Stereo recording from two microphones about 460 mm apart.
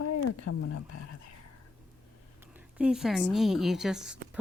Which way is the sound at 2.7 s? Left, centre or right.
Centre.